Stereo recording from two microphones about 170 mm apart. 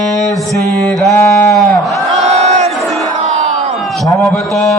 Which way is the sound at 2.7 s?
Centre (ahead or behind).